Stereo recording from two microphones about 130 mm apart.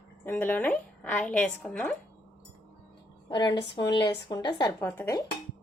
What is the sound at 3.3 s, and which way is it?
Speech, 35° left (ahead or behind).